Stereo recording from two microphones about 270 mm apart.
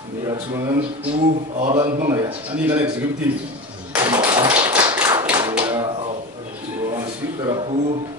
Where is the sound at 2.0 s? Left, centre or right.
Centre.